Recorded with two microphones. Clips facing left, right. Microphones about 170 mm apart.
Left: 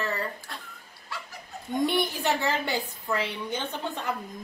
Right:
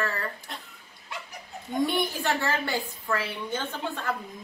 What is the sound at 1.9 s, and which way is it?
Speech, 20° left (ahead or behind).